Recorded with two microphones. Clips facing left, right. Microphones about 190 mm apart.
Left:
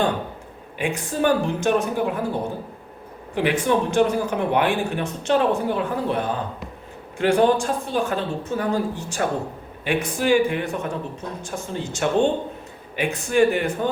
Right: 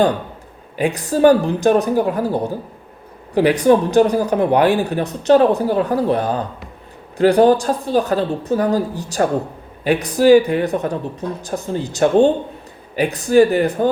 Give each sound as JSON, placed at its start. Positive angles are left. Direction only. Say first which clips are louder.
{"t": 0.8, "sound": "speech", "louder": "right 8 dB", "side_deg": -35}